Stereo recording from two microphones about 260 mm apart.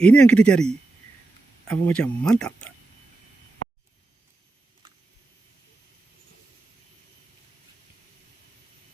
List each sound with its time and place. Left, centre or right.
0.0 s speech: centre